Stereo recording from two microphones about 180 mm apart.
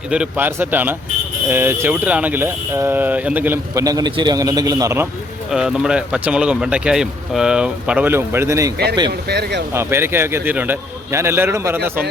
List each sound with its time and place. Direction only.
0.1 s speech: 10° right (ahead or behind)
5.5 s speech: 5° right (ahead or behind)
9.0 s speech: 65° right (ahead or behind)
9.7 s speech: 10° right (ahead or behind)